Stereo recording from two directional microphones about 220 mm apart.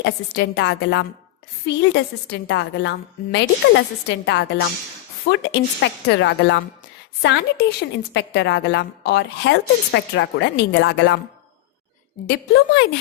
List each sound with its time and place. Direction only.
0.0 s a woman's voice: 50° left (ahead or behind)
12.2 s a woman's voice: 45° left (ahead or behind)